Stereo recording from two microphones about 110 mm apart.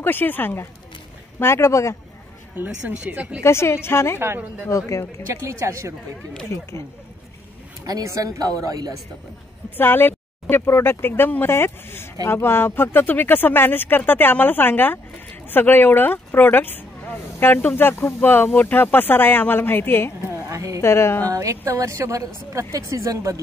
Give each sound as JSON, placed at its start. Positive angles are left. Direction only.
{"t": 0.0, "sound": "speech", "side_deg": 20}
{"t": 2.5, "sound": "speech", "side_deg": -15}
{"t": 3.4, "sound": "speech", "side_deg": 25}
{"t": 5.3, "sound": "speech", "side_deg": -25}
{"t": 7.8, "sound": "speech", "side_deg": -30}
{"t": 9.8, "sound": "speech", "side_deg": 20}
{"t": 20.2, "sound": "a sound", "side_deg": -25}
{"t": 20.8, "sound": "speech", "side_deg": 25}
{"t": 21.3, "sound": "speech", "side_deg": -30}